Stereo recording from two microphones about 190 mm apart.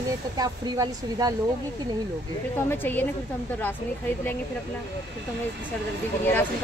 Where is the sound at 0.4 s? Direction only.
20° right (ahead or behind).